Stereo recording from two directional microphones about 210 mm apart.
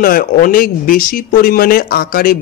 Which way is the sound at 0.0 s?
40° left (ahead or behind).